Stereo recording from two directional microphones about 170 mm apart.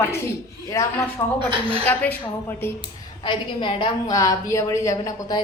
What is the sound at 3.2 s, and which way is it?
A woman's voice, 30° left (ahead or behind).